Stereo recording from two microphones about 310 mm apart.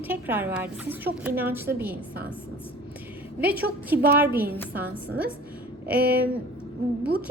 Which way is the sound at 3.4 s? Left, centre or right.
Centre.